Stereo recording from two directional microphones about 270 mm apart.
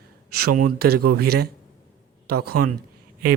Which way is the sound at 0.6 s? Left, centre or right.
Right.